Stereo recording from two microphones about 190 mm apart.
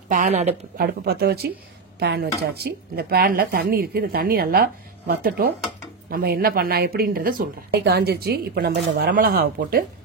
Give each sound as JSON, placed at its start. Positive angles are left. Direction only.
{"t": 0.1, "sound": "speech", "side_deg": -40}
{"t": 0.7, "sound": "speech", "side_deg": -55}